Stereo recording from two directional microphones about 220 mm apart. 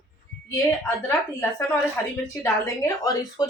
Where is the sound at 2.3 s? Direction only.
15° left (ahead or behind).